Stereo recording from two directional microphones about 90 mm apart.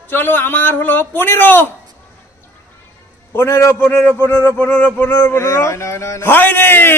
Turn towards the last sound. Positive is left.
turn(degrees=25)  # may be behind; listen again after turning